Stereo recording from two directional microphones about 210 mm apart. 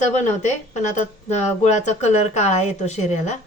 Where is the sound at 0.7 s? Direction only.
35° left (ahead or behind).